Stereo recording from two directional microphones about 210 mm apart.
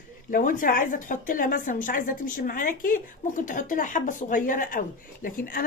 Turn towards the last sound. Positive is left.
turn(degrees=40)  # may be behind; listen again after turning